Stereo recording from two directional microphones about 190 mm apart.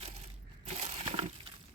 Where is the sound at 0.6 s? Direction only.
35° right (ahead or behind).